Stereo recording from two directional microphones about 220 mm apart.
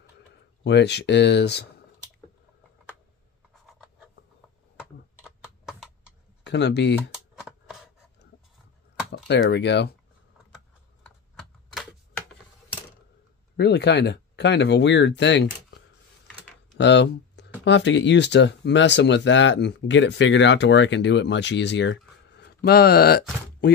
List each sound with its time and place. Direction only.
0.7 s speech: 50° left (ahead or behind)
3.6 s writing: 5° right (ahead or behind)
5.2 s typing: centre (ahead or behind)
6.4 s speech: 50° left (ahead or behind)
7.0 s shuffling cards: 5° right (ahead or behind)
9.1 s speech: 50° left (ahead or behind)
11.1 s typewriter: centre (ahead or behind)
13.6 s speech: 50° left (ahead or behind)
16.7 s a sound: 50° left (ahead or behind)
17.6 s speech: 55° left (ahead or behind)